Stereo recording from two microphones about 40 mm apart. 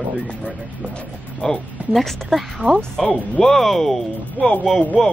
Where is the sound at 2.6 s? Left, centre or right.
Right.